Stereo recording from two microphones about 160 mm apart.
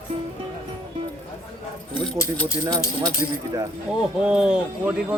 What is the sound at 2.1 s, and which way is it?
Speech, 20° left (ahead or behind).